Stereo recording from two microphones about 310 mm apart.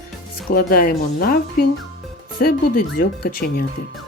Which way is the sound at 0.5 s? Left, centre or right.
Left.